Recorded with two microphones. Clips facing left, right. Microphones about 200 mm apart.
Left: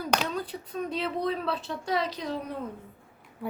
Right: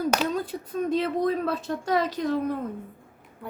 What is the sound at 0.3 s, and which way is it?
Speech, 45° right (ahead or behind).